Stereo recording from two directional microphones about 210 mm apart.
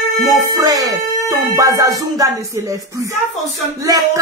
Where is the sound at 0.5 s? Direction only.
15° right (ahead or behind).